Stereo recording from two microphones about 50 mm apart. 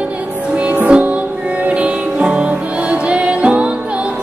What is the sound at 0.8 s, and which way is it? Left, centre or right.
Music, right.